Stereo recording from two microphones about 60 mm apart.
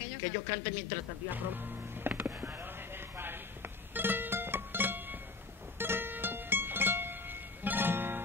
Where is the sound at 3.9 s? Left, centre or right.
Right.